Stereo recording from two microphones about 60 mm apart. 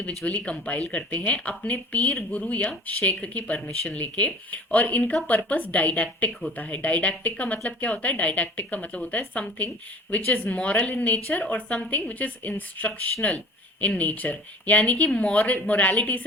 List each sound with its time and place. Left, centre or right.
0.3 s a woman's voice: left